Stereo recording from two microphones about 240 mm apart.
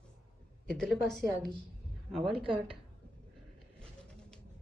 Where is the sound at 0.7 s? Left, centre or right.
Centre.